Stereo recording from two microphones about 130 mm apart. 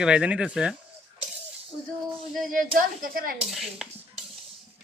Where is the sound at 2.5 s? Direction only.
90° right.